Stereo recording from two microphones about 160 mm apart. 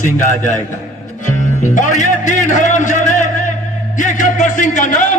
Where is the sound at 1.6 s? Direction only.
50° left (ahead or behind).